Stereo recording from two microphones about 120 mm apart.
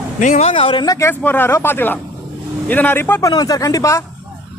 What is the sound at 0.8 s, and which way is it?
Speech, 25° left (ahead or behind).